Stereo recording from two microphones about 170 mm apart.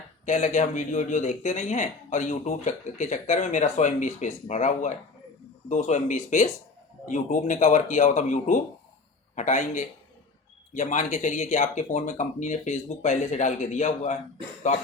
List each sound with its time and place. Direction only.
0.3 s speech: 45° left (ahead or behind)